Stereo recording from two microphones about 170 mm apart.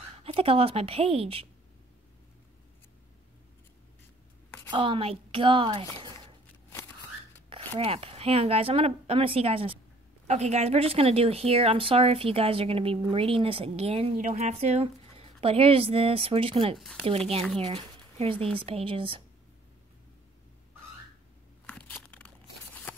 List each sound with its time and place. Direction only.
0.2 s speech: 35° right (ahead or behind)
4.6 s a woman's voice: 30° right (ahead or behind)
7.4 s speech: 35° right (ahead or behind)
21.6 s a sound: 10° left (ahead or behind)